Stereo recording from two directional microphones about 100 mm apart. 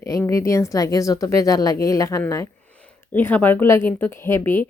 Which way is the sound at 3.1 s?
20° left (ahead or behind).